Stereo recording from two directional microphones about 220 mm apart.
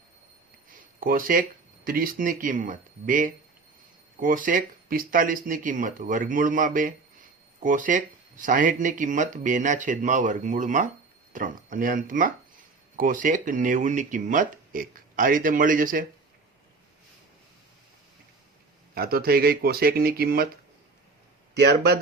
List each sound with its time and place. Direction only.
0.7 s speech: 40° right (ahead or behind)
18.9 s speech: 45° right (ahead or behind)
21.5 s speech: 50° right (ahead or behind)